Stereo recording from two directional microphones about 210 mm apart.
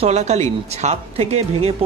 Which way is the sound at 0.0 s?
30° right (ahead or behind).